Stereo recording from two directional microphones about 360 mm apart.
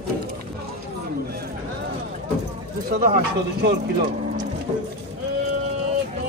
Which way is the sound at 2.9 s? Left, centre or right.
Right.